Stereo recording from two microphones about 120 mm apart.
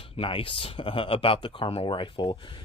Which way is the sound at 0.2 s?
45° left (ahead or behind).